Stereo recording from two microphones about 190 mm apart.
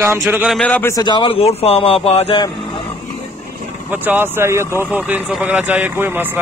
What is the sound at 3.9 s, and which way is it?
A man's voice, 10° right (ahead or behind).